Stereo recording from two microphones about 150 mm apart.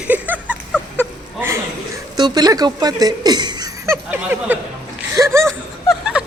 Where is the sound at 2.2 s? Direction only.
25° right (ahead or behind).